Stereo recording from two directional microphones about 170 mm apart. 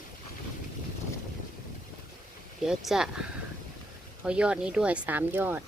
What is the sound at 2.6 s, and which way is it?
Speech, 5° right (ahead or behind).